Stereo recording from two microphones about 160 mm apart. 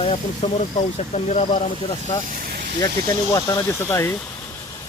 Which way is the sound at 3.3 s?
20° left (ahead or behind).